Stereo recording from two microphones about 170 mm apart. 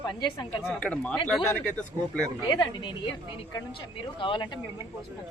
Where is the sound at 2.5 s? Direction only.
25° left (ahead or behind).